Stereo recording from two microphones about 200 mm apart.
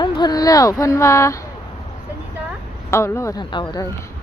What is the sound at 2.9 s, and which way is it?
Speech, 15° left (ahead or behind).